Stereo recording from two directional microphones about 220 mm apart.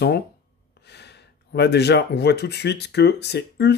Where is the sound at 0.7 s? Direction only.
50° left (ahead or behind).